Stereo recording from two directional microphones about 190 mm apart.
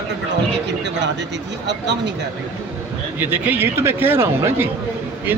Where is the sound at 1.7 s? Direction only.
65° right (ahead or behind).